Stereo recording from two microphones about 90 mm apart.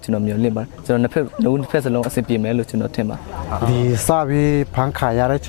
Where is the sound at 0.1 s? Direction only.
20° left (ahead or behind).